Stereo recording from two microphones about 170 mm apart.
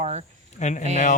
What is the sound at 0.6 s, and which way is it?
Speech, 45° left (ahead or behind).